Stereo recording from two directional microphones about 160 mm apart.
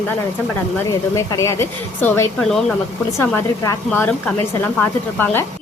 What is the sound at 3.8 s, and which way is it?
Speech, 10° left (ahead or behind).